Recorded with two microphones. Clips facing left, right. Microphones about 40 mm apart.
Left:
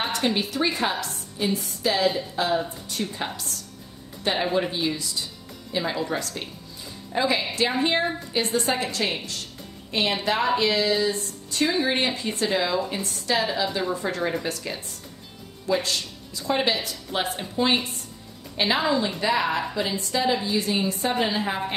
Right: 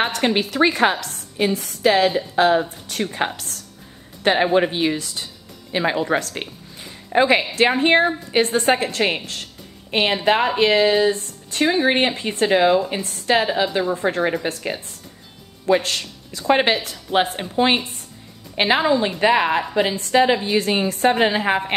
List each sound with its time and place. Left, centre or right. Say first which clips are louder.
0.0 s a woman's voice: right 5 dB; right
15.6 s a woman's voice: right 6 dB; right